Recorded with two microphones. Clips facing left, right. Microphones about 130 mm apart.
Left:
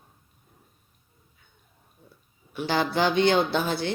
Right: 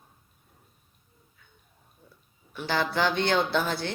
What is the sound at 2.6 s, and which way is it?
Speech, 15° left (ahead or behind).